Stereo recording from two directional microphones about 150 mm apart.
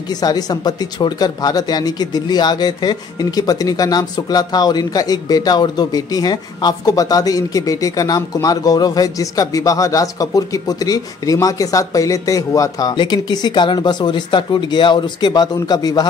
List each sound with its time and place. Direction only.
0.2 s speech: 25° left (ahead or behind)